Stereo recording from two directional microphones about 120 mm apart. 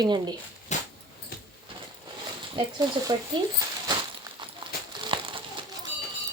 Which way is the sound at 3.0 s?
35° right (ahead or behind).